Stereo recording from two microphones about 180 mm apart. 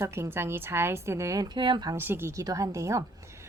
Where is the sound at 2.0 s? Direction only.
10° right (ahead or behind).